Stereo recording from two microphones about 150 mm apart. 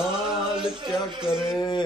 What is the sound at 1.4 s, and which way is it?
Speech, 25° left (ahead or behind).